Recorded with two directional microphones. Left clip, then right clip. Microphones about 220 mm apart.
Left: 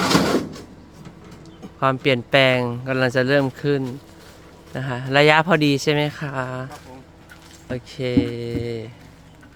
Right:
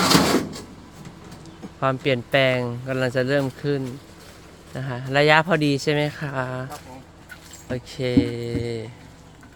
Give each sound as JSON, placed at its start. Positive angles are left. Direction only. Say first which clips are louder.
{"t": 1.8, "sound": "speech", "louder": "left 3 dB", "side_deg": 15}